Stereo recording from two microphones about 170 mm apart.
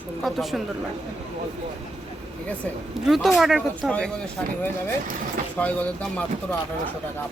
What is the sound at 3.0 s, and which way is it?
Speech, centre (ahead or behind).